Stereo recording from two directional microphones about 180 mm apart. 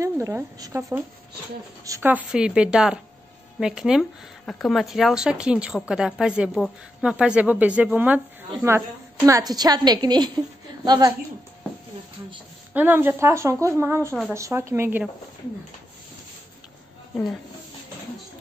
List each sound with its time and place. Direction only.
0.0 s a woman's voice: 15° right (ahead or behind)
12.7 s a woman's voice: 10° right (ahead or behind)